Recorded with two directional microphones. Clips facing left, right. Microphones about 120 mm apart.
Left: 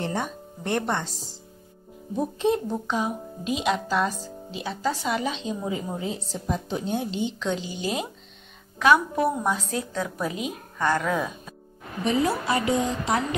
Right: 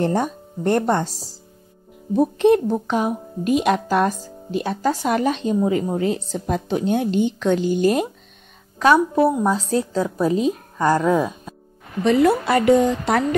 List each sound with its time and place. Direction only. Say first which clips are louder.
0.0 s a child's voice: right 8 dB; 45° right (ahead or behind)
2.1 s a child's voice: right 9 dB; 65° right (ahead or behind)
8.7 s a woman's voice: right 5 dB; 35° right (ahead or behind)
12.0 s a woman's voice: right 8 dB; 75° right (ahead or behind)